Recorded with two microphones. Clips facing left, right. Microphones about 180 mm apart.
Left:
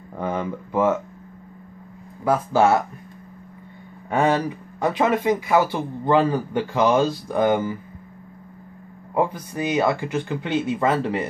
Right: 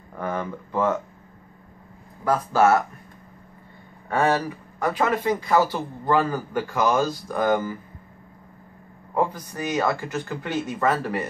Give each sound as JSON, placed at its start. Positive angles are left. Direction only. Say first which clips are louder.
{"t": 0.2, "sound": "speech", "louder": "left 2 dB", "side_deg": 15}
{"t": 2.2, "sound": "speech", "louder": "left 1 dB", "side_deg": 15}
{"t": 4.1, "sound": "speech", "louder": "left 2 dB", "side_deg": 15}
{"t": 6.0, "sound": "speech", "louder": "left 3 dB", "side_deg": 20}
{"t": 9.1, "sound": "speech", "louder": "left 2 dB", "side_deg": 15}